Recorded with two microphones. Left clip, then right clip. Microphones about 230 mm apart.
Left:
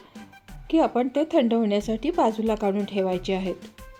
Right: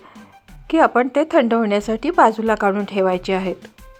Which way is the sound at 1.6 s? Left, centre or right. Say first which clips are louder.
Right 6 dB; centre.